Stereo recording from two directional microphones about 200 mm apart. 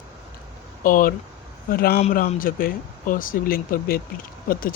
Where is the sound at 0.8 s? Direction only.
45° left (ahead or behind).